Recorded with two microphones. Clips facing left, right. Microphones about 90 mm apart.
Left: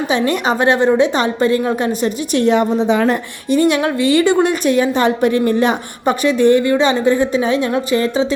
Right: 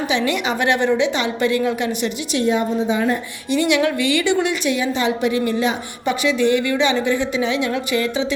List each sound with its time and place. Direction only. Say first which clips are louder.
0.1 s a woman's voice: left 5 dB; 40° left (ahead or behind)
2.4 s a woman's voice: left 5 dB; 65° left (ahead or behind)
3.5 s a woman's voice: left 3 dB; 40° left (ahead or behind)